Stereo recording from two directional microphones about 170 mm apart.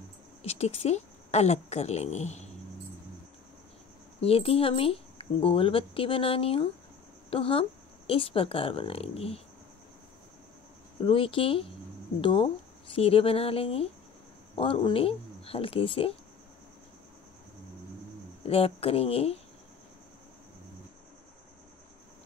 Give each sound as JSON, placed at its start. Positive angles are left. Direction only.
{"t": 0.4, "sound": "a woman's voice", "side_deg": 35}
{"t": 4.2, "sound": "speech", "side_deg": 35}
{"t": 11.1, "sound": "speech", "side_deg": 30}
{"t": 18.4, "sound": "speech", "side_deg": 35}